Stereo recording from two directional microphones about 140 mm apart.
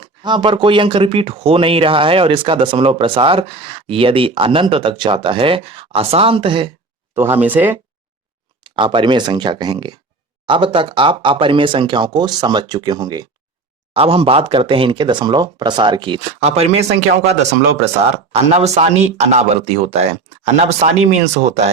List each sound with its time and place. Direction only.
0.0 s speech: 35° right (ahead or behind)
7.4 s speech: 10° right (ahead or behind)
8.6 s speech: 35° right (ahead or behind)
13.9 s speech: 40° right (ahead or behind)
16.4 s speech: 50° right (ahead or behind)
17.8 s speech: 50° right (ahead or behind)